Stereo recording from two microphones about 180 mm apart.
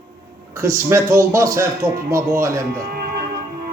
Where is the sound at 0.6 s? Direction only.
15° right (ahead or behind).